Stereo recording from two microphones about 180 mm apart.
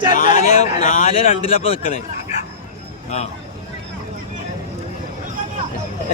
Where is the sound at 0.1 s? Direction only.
45° left (ahead or behind).